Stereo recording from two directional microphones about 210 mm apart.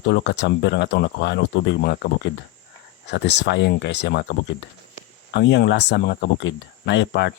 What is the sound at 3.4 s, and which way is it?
Speech, 55° left (ahead or behind).